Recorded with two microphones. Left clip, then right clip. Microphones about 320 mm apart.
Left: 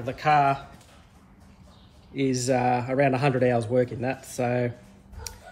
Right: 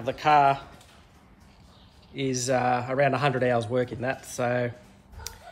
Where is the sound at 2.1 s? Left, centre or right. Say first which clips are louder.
Left 1 dB; right.